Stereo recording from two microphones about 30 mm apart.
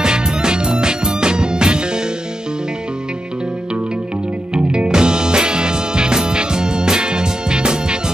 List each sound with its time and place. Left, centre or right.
0.0 s music: right
4.6 s music: right